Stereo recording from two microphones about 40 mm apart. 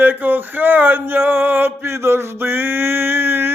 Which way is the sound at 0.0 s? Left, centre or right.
Right.